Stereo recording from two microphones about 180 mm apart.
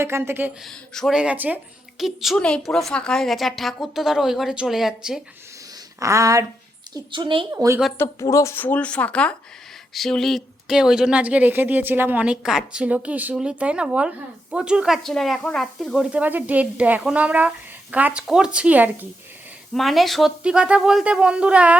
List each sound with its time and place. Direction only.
0.0 s a woman's voice: 15° right (ahead or behind)
0.6 s a woman's voice: centre (ahead or behind)
6.0 s a woman's voice: 15° right (ahead or behind)
7.5 s a woman's voice: 15° right (ahead or behind)
7.9 s a woman's voice: 15° left (ahead or behind); by 21.8 s 5° right (ahead or behind)